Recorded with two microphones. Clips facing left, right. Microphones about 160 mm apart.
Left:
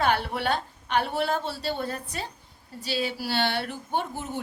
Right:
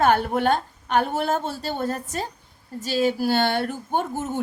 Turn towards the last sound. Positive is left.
turn(degrees=-45)  # may be behind; listen again after turning